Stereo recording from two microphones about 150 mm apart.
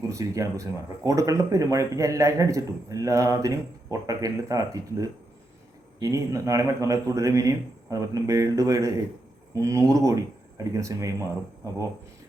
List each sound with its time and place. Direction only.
0.1 s speech: 20° right (ahead or behind)